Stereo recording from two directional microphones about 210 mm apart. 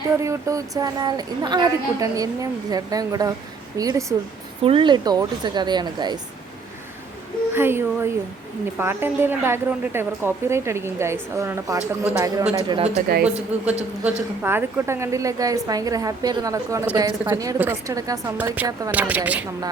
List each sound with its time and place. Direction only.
0.2 s a woman's voice: 15° right (ahead or behind)
7.5 s a woman's voice: 10° right (ahead or behind)
13.1 s speech: 45° right (ahead or behind)
13.5 s a woman's voice: 5° right (ahead or behind)